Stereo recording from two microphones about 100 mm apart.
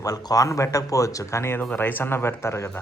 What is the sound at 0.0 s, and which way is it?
Speech, 40° left (ahead or behind).